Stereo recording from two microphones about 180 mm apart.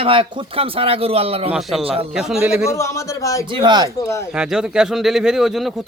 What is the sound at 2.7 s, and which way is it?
Speech, 15° left (ahead or behind).